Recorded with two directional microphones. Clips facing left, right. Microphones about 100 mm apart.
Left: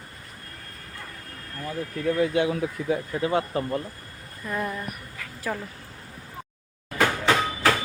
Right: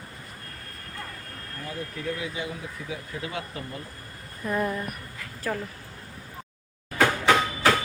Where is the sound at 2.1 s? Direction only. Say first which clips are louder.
Left 10 dB; 60° left (ahead or behind).